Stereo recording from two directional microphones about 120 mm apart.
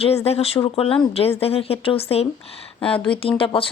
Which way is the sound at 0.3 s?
55° left (ahead or behind).